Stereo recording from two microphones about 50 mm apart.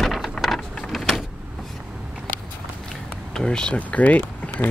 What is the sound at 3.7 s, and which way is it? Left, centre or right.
Speech, left.